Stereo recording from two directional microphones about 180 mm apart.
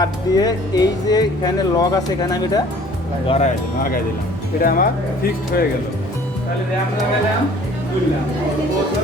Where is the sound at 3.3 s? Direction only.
40° left (ahead or behind).